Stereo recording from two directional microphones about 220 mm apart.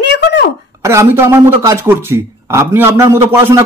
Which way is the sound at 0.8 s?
10° right (ahead or behind).